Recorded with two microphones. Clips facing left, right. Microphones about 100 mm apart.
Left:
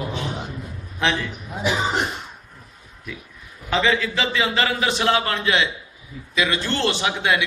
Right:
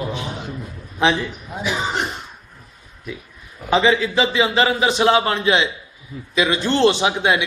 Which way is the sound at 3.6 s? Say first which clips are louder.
Right 4 dB; 20° right (ahead or behind).